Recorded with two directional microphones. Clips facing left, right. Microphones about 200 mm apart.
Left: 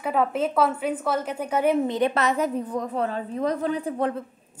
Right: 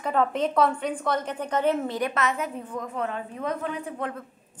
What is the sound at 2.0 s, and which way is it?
A woman's voice, 30° left (ahead or behind).